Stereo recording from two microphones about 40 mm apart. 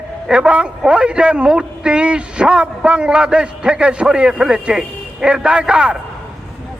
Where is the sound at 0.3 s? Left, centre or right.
Right.